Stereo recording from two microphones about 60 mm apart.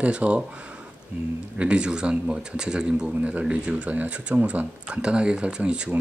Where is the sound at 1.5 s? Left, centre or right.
Centre.